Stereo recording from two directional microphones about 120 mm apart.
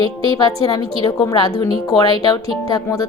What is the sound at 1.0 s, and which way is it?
A woman's voice, 30° left (ahead or behind).